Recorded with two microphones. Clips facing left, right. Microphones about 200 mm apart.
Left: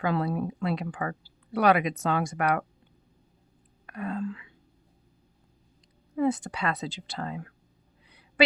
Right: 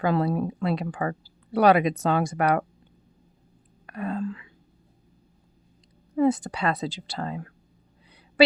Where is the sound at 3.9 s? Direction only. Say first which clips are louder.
Right 3 dB; 35° right (ahead or behind).